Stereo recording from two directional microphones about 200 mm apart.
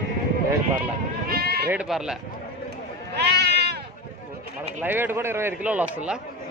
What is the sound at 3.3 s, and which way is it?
Sheep, 55° right (ahead or behind).